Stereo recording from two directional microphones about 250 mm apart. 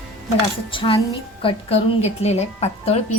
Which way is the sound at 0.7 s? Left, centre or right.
Centre.